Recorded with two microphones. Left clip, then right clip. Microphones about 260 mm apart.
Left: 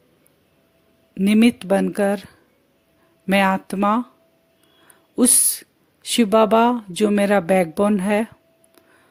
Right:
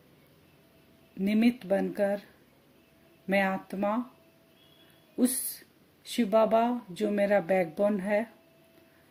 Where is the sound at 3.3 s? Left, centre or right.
Left.